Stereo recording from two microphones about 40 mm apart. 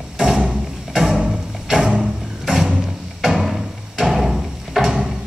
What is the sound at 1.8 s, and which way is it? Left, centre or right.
Music, right.